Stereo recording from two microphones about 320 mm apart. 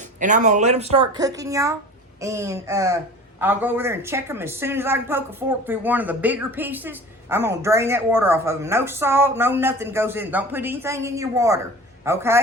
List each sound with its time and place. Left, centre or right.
0.2 s a woman's voice: right